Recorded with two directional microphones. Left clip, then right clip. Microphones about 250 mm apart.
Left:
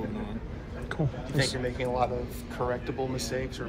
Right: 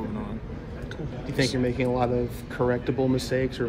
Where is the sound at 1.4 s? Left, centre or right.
Right.